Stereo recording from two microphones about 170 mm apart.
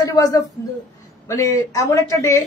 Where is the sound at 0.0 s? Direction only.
20° left (ahead or behind).